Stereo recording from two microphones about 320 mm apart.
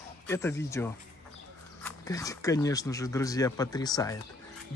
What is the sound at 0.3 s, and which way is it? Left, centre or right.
Speech, centre.